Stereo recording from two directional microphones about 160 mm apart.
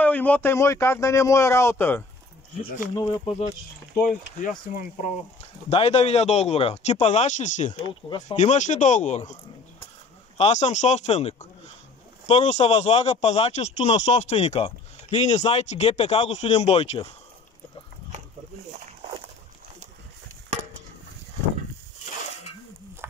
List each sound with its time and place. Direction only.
0.0 s speech: 10° left (ahead or behind)
3.3 s speech: 40° left (ahead or behind)
4.0 s speech: 5° right (ahead or behind)
4.4 s speech: 55° left (ahead or behind)
5.7 s speech: 40° left (ahead or behind)
10.3 s speech: 45° left (ahead or behind)